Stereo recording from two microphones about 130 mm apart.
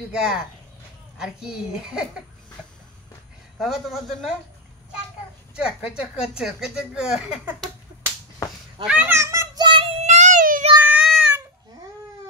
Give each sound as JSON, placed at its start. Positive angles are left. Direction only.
{"t": 0.1, "sound": "a woman's voice", "side_deg": -5}
{"t": 3.5, "sound": "a woman's voice", "side_deg": 0}
{"t": 5.6, "sound": "a woman's voice", "side_deg": -5}
{"t": 8.8, "sound": "a child's voice", "side_deg": -10}
{"t": 9.6, "sound": "child singing", "side_deg": -40}
{"t": 10.0, "sound": "child singing", "side_deg": -65}
{"t": 10.8, "sound": "child singing", "side_deg": -10}